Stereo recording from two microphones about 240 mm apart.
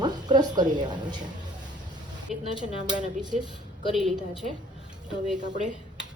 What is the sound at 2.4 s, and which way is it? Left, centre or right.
Speech, centre.